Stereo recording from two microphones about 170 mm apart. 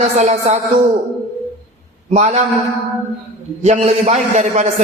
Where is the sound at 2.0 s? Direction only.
40° right (ahead or behind).